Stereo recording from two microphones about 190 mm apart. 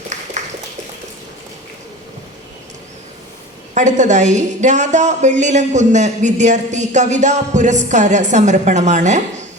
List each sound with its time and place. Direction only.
3.8 s a woman's voice: 40° right (ahead or behind)